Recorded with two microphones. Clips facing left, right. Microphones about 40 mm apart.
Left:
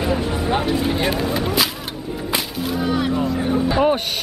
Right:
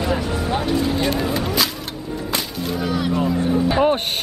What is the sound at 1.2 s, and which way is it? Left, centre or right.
Vehicle, centre.